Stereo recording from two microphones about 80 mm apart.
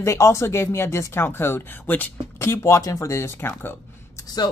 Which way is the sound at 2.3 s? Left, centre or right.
Left.